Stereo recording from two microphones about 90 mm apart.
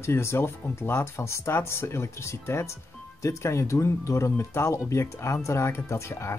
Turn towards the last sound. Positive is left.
turn(degrees=30)  # may be behind; listen again after turning